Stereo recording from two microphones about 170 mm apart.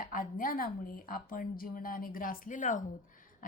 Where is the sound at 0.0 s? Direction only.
55° left (ahead or behind).